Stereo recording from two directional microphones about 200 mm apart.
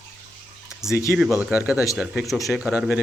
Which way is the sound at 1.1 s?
Centre (ahead or behind).